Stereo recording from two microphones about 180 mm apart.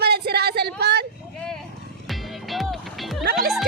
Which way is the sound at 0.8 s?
65° right (ahead or behind).